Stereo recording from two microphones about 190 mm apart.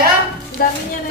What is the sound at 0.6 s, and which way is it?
Music, 50° left (ahead or behind).